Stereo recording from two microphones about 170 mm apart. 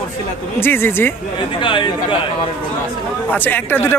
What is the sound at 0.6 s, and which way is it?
Speech, 15° left (ahead or behind).